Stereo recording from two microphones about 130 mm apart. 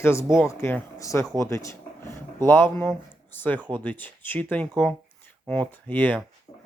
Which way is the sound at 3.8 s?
15° left (ahead or behind).